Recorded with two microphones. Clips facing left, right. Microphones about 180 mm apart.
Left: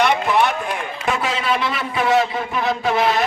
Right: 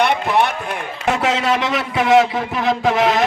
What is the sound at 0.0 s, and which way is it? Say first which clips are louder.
Run: even; 60° right (ahead or behind).